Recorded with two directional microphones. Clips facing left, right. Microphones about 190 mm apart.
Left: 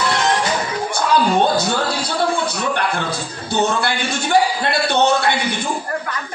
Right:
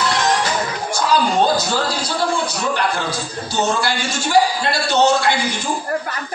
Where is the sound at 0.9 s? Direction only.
60° left (ahead or behind).